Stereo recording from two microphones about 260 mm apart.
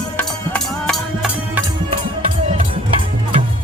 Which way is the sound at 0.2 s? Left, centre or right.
Centre.